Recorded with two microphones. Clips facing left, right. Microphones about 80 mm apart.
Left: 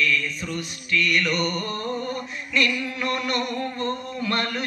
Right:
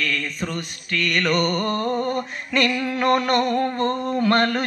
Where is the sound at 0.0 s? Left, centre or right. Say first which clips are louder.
Left 1 dB; right.